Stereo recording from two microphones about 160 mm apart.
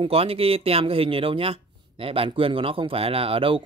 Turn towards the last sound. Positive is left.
turn(degrees=-35)  # may be behind; listen again after turning